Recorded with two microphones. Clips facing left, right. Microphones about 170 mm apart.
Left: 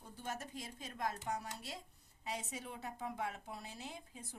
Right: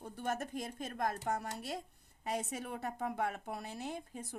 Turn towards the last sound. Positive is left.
turn(degrees=-55)  # may be behind; listen again after turning